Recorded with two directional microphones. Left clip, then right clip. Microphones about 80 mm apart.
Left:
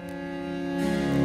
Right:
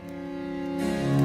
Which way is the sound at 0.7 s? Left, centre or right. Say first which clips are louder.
Left 1 dB; centre.